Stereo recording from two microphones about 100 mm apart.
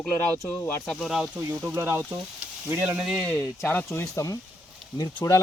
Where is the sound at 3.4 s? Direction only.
25° left (ahead or behind).